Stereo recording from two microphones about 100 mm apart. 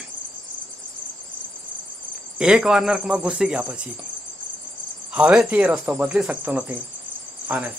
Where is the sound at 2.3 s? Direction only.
10° right (ahead or behind).